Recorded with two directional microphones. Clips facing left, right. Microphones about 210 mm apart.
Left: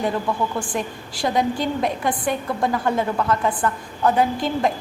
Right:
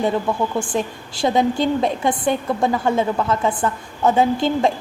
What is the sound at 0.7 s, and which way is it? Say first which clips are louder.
A woman's voice: right 3 dB; 25° right (ahead or behind).